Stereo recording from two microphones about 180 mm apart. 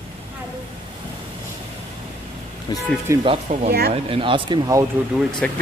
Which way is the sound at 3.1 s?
15° right (ahead or behind).